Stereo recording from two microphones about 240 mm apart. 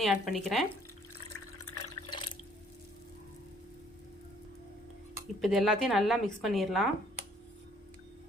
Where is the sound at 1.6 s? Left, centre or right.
Left.